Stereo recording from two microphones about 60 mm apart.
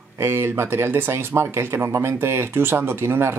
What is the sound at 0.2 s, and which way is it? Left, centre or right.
Speech, right.